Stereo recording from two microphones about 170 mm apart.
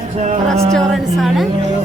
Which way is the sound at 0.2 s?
40° right (ahead or behind).